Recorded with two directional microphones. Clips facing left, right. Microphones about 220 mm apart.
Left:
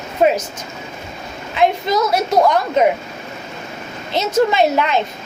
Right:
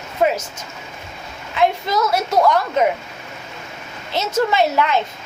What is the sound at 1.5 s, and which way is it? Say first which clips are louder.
A woman's voice: left 2 dB; 20° left (ahead or behind).